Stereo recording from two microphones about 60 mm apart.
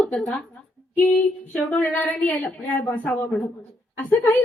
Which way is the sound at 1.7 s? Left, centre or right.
Left.